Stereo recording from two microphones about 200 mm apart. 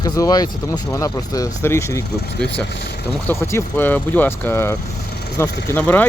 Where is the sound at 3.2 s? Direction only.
10° left (ahead or behind).